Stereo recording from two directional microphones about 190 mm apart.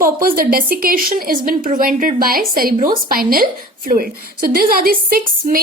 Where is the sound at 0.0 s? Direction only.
50° right (ahead or behind).